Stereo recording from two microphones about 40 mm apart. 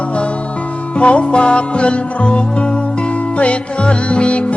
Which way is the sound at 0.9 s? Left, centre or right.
Left.